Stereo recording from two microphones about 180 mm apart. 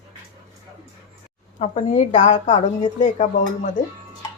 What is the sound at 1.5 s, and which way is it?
A woman's voice, 40° left (ahead or behind).